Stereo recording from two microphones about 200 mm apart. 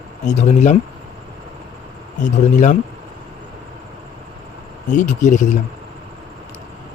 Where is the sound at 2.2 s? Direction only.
35° left (ahead or behind).